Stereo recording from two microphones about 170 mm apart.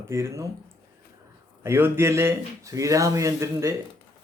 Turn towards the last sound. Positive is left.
turn(degrees=-15)  # may be behind; listen again after turning